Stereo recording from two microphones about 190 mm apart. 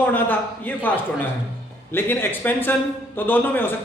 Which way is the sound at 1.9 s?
10° left (ahead or behind).